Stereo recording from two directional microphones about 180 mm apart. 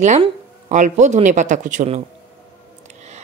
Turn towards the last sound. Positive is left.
turn(degrees=-40)  # may be behind; listen again after turning